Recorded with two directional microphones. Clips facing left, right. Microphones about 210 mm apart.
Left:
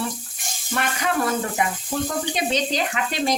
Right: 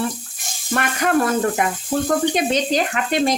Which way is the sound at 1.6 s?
55° right (ahead or behind).